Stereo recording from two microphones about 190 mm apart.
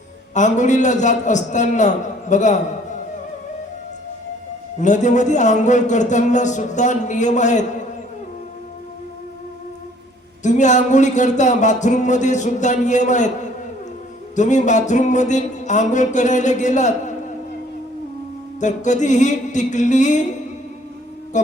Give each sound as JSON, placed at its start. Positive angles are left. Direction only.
{"t": 0.3, "sound": "speech", "side_deg": 40}
{"t": 4.8, "sound": "speech", "side_deg": 40}
{"t": 10.4, "sound": "speech", "side_deg": 40}
{"t": 14.3, "sound": "speech", "side_deg": 40}
{"t": 18.6, "sound": "speech", "side_deg": 40}
{"t": 21.3, "sound": "speech", "side_deg": 40}